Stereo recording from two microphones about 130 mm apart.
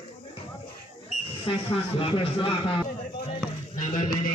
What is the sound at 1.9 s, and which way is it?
Speech, 40° left (ahead or behind).